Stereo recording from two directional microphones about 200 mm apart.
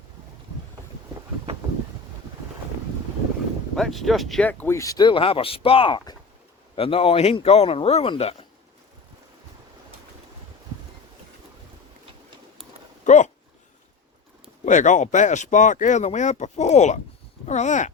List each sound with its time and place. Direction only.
3.8 s speech: centre (ahead or behind); by 8.4 s 30° left (ahead or behind)
13.1 s a sound: 35° left (ahead or behind)
14.6 s speech: 40° left (ahead or behind)